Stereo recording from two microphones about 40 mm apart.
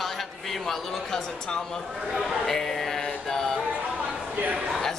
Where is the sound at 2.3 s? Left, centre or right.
Centre.